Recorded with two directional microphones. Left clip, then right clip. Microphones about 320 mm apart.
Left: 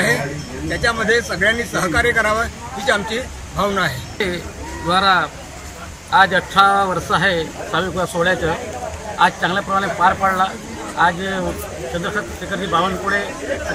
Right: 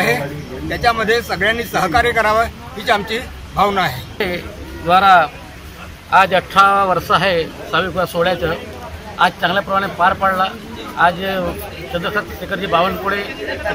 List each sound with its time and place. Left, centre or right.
0.7 s speech: centre